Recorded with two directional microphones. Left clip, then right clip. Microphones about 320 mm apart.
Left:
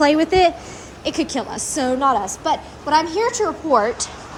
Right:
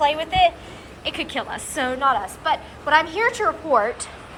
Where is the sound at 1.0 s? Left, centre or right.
Centre.